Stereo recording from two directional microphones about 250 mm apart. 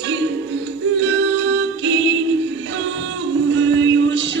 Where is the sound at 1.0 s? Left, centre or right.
Right.